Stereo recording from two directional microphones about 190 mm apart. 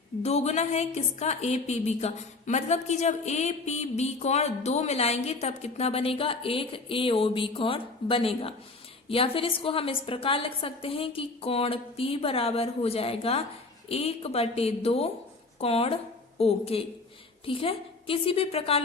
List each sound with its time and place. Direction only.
0.2 s a woman's voice: 35° left (ahead or behind)